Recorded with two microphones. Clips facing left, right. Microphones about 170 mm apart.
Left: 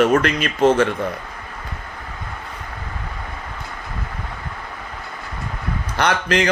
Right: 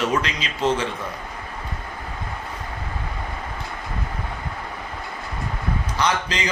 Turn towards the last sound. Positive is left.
turn(degrees=65)  # may be behind; listen again after turning